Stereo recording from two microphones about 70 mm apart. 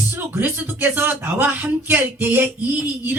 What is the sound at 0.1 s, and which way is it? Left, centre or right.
Speech, right.